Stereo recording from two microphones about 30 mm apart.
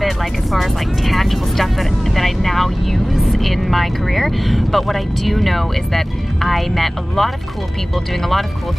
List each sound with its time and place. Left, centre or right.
0.0 s speech: centre